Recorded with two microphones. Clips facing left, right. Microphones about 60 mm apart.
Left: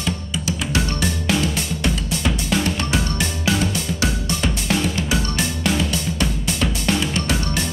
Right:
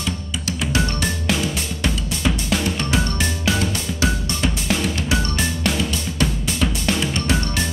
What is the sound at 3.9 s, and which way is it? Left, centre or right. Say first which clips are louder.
Music: even; centre.